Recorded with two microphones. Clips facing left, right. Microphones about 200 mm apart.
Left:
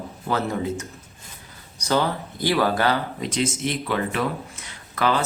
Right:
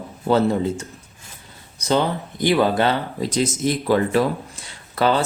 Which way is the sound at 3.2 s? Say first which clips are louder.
Right 6 dB; 40° right (ahead or behind).